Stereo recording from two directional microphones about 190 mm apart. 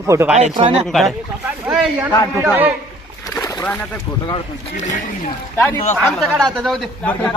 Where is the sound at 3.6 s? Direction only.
5° left (ahead or behind).